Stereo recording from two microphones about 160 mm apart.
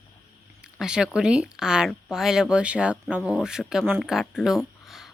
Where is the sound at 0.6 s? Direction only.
5° right (ahead or behind).